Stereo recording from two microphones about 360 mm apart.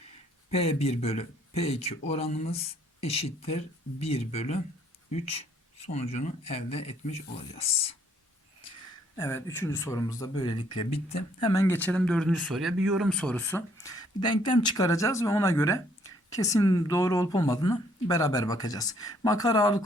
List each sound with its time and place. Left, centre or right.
0.5 s speech: centre
9.1 s speech: centre